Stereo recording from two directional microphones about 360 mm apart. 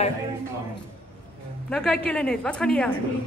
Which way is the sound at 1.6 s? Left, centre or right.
Centre.